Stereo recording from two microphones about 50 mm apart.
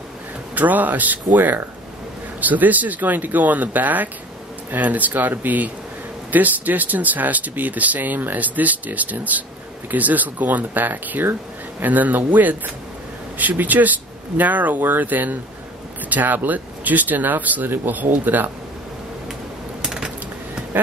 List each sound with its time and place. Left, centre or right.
0.6 s speech: right
19.8 s a sound: centre
20.7 s speech: right